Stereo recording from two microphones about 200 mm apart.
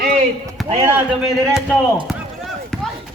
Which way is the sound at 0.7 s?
25° right (ahead or behind).